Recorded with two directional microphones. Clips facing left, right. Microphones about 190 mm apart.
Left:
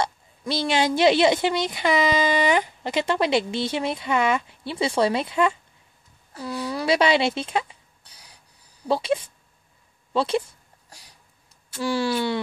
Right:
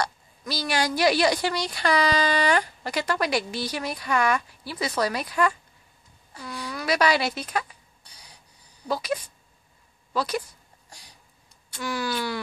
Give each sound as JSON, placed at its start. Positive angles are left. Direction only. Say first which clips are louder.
{"t": 0.0, "sound": "a woman's voice", "louder": "left 3 dB", "side_deg": 25}
{"t": 8.8, "sound": "a woman's voice", "louder": "left 5 dB", "side_deg": 30}
{"t": 11.8, "sound": "a woman's voice", "louder": "left 5 dB", "side_deg": 30}